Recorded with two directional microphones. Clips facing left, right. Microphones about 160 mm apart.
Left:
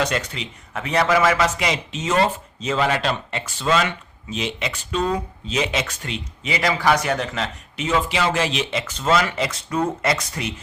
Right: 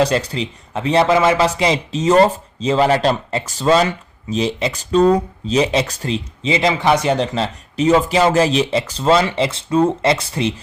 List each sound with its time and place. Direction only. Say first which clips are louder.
0.0 s speech: right 7 dB; 35° right (ahead or behind)